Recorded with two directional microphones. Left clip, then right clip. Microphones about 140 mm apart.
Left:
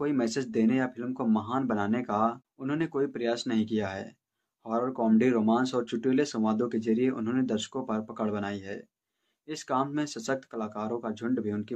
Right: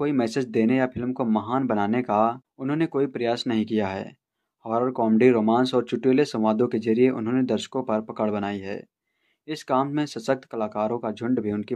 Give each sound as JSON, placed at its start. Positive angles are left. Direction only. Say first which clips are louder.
{"t": 0.0, "sound": "speech", "louder": "right 5 dB", "side_deg": -35}